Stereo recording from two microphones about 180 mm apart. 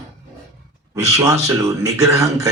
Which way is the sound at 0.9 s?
15° right (ahead or behind).